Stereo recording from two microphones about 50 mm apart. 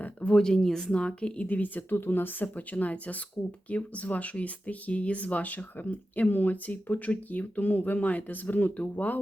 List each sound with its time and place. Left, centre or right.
0.0 s a sound: left
0.3 s speech: centre
1.5 s speech: left